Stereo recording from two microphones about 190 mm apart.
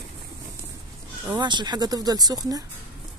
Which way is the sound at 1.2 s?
25° right (ahead or behind).